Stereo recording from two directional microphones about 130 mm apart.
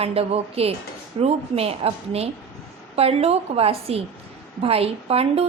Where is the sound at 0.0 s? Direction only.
50° right (ahead or behind).